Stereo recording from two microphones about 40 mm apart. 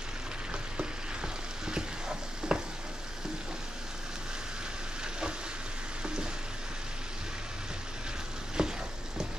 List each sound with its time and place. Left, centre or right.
0.7 s stir: right
8.6 s frying: centre